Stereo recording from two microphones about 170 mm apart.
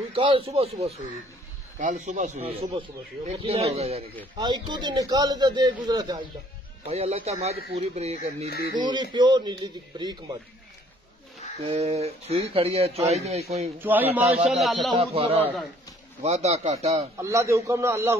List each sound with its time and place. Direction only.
0.1 s speech: 30° right (ahead or behind)
1.8 s speech: 45° right (ahead or behind)
4.4 s a man's voice: 25° right (ahead or behind)
6.9 s speech: 40° right (ahead or behind)
8.7 s a man's voice: 25° right (ahead or behind)
11.6 s speech: 40° right (ahead or behind)
13.7 s a man's voice: 10° right (ahead or behind)
15.0 s speech: 35° right (ahead or behind)
17.2 s a man's voice: 15° right (ahead or behind)